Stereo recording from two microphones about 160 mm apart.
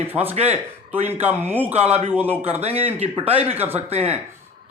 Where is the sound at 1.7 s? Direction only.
40° right (ahead or behind).